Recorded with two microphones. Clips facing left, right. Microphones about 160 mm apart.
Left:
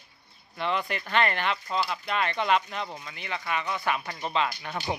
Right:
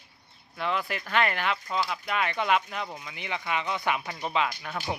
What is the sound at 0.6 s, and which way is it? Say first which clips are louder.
Speech: left 1 dB; 5° right (ahead or behind).